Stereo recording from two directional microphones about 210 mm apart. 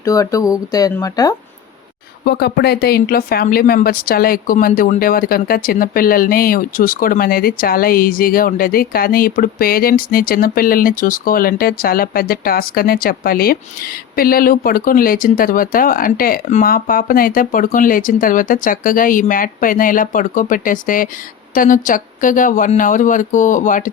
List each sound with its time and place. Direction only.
0.0 s speech: 15° left (ahead or behind)
2.2 s speech: 50° left (ahead or behind)